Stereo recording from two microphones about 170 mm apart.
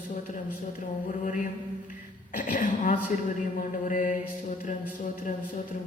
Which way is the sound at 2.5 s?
50° left (ahead or behind).